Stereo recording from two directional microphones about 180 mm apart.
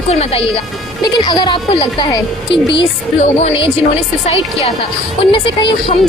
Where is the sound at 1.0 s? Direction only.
25° left (ahead or behind).